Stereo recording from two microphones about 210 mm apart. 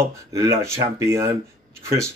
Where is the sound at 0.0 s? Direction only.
15° right (ahead or behind).